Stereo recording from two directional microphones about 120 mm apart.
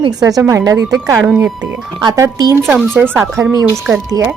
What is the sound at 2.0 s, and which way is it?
Speech, 30° right (ahead or behind).